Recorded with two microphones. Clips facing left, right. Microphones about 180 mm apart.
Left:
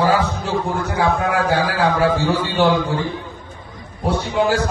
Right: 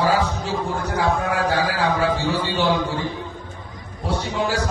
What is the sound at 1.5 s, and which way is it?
A man's voice, 55° left (ahead or behind).